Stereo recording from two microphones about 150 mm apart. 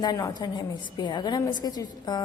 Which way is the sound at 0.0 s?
25° left (ahead or behind).